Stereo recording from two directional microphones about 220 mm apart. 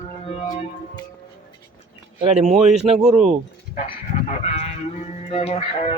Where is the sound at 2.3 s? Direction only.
30° right (ahead or behind).